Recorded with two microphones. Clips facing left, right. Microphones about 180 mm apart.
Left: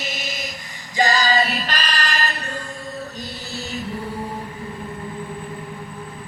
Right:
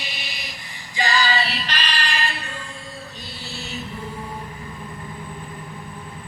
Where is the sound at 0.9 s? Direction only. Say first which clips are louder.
Left 4 dB; 45° left (ahead or behind).